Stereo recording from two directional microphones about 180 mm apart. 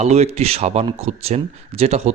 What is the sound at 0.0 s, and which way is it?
Speech, 35° right (ahead or behind).